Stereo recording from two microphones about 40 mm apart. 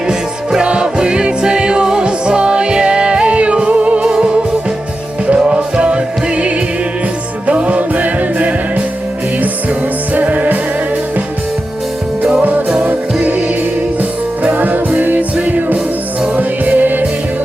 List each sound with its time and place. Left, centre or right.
0.1 s music: right
10.2 s music: right
12.4 s music: right